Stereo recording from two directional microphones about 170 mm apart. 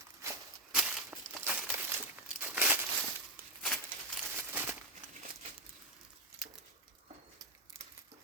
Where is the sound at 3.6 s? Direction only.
5° left (ahead or behind).